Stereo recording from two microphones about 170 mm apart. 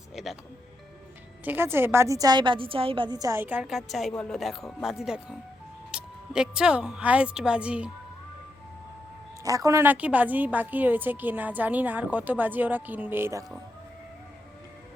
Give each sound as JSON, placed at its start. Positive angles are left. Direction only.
{"t": 0.2, "sound": "music", "side_deg": 0}
{"t": 1.5, "sound": "a woman's voice", "side_deg": -15}
{"t": 9.4, "sound": "a woman's voice", "side_deg": -20}